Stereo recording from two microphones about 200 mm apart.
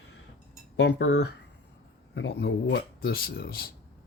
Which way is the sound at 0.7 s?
60° left (ahead or behind).